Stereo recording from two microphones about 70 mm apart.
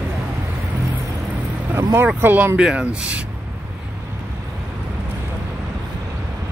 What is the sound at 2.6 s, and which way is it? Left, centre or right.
Speech, centre.